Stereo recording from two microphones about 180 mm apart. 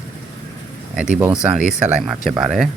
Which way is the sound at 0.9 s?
5° right (ahead or behind).